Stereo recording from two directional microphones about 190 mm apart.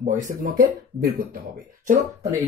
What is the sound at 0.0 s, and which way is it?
Speech, 45° right (ahead or behind).